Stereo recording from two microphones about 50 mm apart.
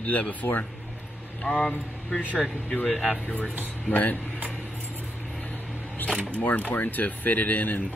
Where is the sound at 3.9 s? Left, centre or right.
Left.